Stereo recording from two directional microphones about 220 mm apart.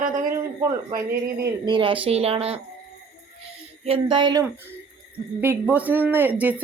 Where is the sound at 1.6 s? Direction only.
20° right (ahead or behind).